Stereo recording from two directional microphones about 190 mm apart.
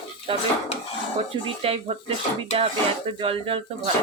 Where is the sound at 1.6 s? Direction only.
30° right (ahead or behind).